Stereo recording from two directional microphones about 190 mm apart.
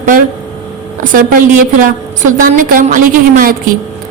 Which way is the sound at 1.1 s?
45° right (ahead or behind).